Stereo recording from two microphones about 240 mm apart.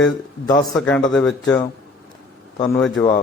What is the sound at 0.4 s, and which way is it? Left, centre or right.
Speech, centre.